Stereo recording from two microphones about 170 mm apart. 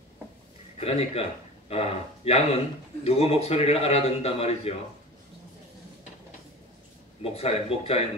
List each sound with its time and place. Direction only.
0.7 s a man's voice: 40° left (ahead or behind)
7.3 s a man's voice: 35° left (ahead or behind)